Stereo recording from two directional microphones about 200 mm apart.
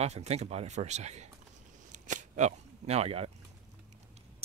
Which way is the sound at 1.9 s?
35° right (ahead or behind).